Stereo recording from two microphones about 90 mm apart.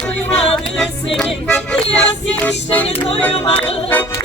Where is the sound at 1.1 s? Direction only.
10° left (ahead or behind).